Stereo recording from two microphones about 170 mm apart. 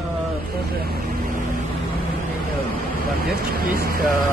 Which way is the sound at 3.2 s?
65° right (ahead or behind).